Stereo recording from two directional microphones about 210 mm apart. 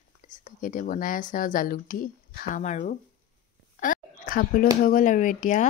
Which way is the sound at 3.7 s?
40° left (ahead or behind).